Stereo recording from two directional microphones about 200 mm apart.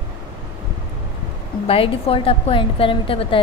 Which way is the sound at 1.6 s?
30° left (ahead or behind).